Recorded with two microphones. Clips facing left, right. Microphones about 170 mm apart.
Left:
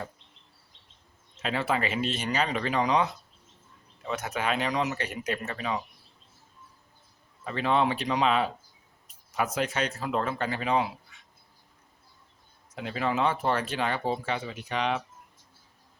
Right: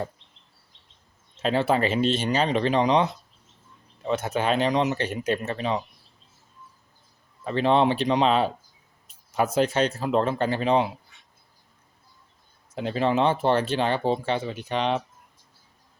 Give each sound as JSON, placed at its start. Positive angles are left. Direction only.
{"t": 1.4, "sound": "speech", "side_deg": -30}
{"t": 7.4, "sound": "speech", "side_deg": -30}
{"t": 12.7, "sound": "speech", "side_deg": -30}